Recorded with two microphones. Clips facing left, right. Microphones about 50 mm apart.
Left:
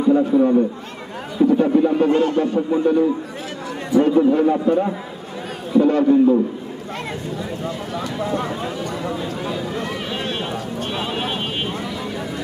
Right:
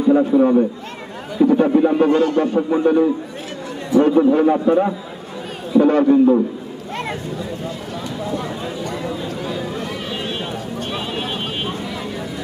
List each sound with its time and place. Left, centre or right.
0.1 s a man's voice: right
1.7 s speech: right
2.0 s speech: left
2.6 s a man's voice: right
3.9 s a man's voice: right
7.9 s speech: left
9.4 s run: left